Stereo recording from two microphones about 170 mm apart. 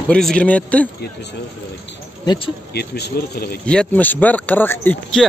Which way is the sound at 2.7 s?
75° left (ahead or behind).